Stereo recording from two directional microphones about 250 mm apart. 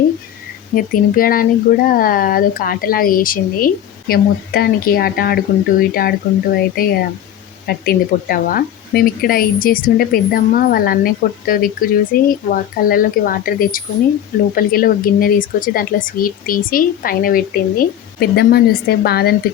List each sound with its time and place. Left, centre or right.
0.8 s a woman's voice: left